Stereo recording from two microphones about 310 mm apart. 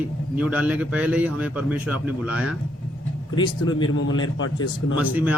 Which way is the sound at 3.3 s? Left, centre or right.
Centre.